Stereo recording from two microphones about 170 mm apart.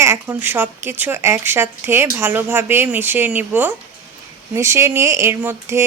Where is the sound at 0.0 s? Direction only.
15° right (ahead or behind).